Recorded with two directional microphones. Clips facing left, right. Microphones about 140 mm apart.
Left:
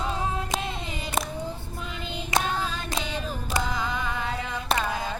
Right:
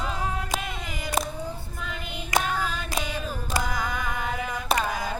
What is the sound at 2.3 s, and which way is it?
Singing, 25° left (ahead or behind).